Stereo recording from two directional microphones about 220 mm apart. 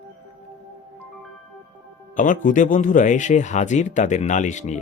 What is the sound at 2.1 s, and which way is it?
Speech, 35° left (ahead or behind).